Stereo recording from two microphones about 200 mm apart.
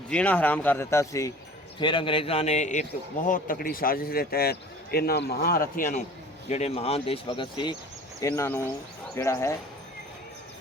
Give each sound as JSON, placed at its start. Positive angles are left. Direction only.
{"t": 0.1, "sound": "speech", "side_deg": 5}
{"t": 6.5, "sound": "speech", "side_deg": 30}
{"t": 8.2, "sound": "speech", "side_deg": 10}